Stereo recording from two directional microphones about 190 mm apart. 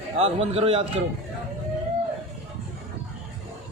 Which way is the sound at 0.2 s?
30° right (ahead or behind).